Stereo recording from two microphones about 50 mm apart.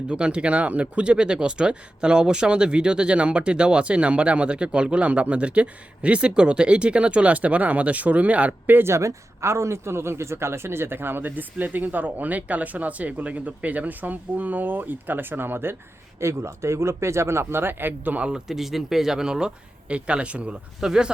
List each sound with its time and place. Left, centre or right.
0.1 s speech: centre
8.8 s a man's voice: right
16.2 s speech: right
18.3 s speech: centre
20.8 s speech: centre